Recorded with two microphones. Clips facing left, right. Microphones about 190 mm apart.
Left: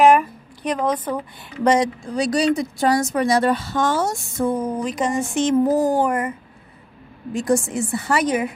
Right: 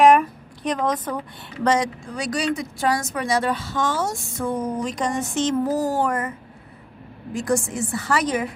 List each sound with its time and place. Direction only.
0.0 s speech: centre (ahead or behind)
1.8 s speech: 35° left (ahead or behind)
3.3 s speech: 60° left (ahead or behind)
4.6 s speech: 5° left (ahead or behind)
7.4 s a woman's voice: 25° left (ahead or behind)